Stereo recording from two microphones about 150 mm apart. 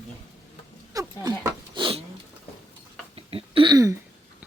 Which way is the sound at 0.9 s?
20° right (ahead or behind).